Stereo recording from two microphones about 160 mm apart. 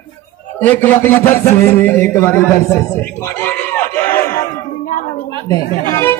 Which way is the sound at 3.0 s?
15° left (ahead or behind).